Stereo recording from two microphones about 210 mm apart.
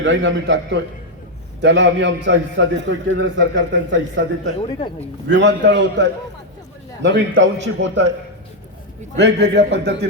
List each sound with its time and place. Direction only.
0.0 s a man's voice: 60° right (ahead or behind)
4.7 s speech: 25° left (ahead or behind)
5.3 s a man's voice: 55° right (ahead or behind)
9.1 s a man's voice: 55° right (ahead or behind)